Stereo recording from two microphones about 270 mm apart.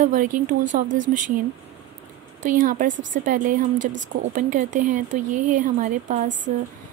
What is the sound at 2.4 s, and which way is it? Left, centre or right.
A woman's voice, right.